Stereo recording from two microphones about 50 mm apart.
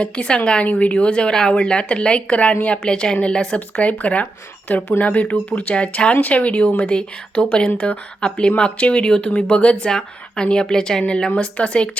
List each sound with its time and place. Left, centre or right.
0.0 s a woman's voice: left